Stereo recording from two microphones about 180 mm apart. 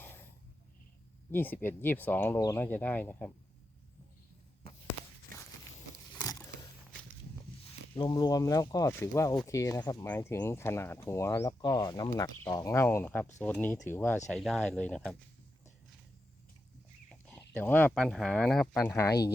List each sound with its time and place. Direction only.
1.3 s speech: 10° left (ahead or behind)
6.1 s a sound: 20° left (ahead or behind)
7.9 s speech: 25° left (ahead or behind)
14.3 s speech: centre (ahead or behind)
17.1 s speech: 5° left (ahead or behind)